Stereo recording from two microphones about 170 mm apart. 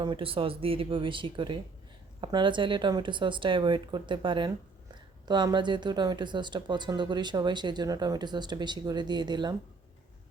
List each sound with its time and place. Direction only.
0.0 s speech: 30° right (ahead or behind)